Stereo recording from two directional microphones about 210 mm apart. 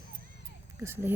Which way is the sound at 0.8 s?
10° right (ahead or behind).